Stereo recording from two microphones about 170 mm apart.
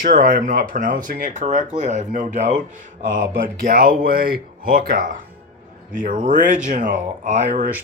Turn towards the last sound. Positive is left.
turn(degrees=-50)  # may be behind; listen again after turning